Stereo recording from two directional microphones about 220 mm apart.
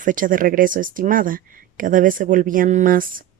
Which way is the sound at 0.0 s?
35° right (ahead or behind).